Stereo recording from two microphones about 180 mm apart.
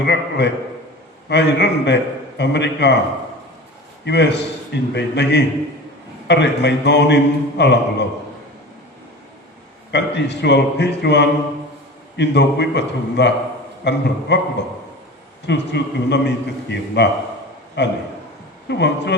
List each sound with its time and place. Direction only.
0.0 s a man's voice: 70° left (ahead or behind)
4.0 s a man's voice: 70° left (ahead or behind)
9.9 s a man's voice: 70° left (ahead or behind)
15.4 s a man's voice: 70° left (ahead or behind)